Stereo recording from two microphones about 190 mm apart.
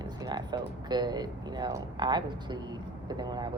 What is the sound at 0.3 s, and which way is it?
Speech, 20° right (ahead or behind).